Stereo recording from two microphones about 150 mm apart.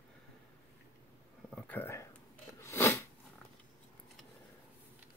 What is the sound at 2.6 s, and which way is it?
Sneeze, 20° left (ahead or behind).